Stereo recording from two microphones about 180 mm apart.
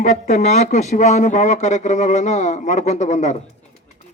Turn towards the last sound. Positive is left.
turn(degrees=40)  # may be behind; listen again after turning